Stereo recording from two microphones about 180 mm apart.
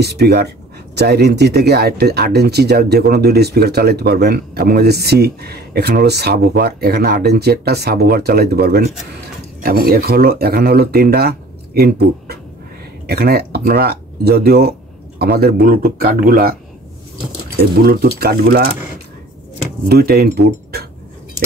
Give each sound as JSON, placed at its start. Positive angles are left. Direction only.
{"t": 0.0, "sound": "speech", "side_deg": -65}
{"t": 18.2, "sound": "speech", "side_deg": -60}
{"t": 19.9, "sound": "speech", "side_deg": -60}